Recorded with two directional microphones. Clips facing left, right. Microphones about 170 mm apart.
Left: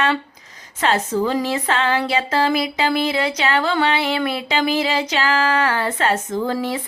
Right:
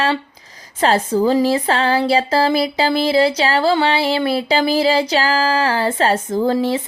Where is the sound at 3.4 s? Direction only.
30° right (ahead or behind).